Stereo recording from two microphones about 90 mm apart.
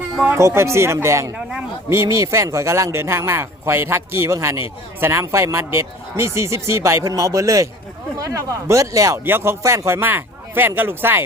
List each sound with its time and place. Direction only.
0.3 s a man's voice: 30° right (ahead or behind)